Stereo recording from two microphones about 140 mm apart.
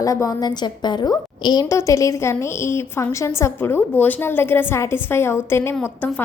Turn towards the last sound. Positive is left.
turn(degrees=10)  # may be behind; listen again after turning